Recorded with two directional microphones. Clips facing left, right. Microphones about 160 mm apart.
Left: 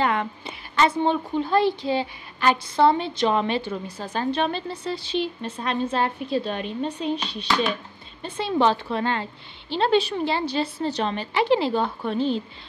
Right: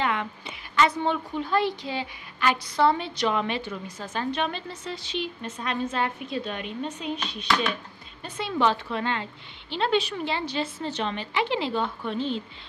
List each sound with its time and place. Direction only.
0.0 s a woman's voice: 40° left (ahead or behind)